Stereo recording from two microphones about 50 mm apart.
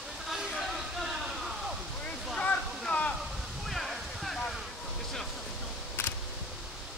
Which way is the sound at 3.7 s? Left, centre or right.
Centre.